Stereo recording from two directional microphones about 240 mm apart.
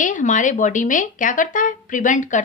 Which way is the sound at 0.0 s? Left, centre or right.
Left.